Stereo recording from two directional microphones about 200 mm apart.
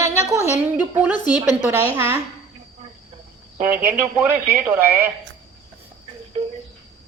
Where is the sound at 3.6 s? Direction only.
10° right (ahead or behind).